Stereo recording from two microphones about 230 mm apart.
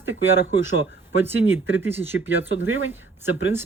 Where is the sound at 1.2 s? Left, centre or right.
Centre.